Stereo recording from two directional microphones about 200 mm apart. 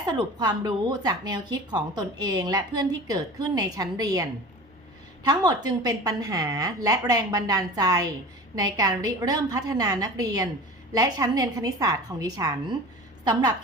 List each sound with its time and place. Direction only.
0.0 s a woman's voice: 20° right (ahead or behind)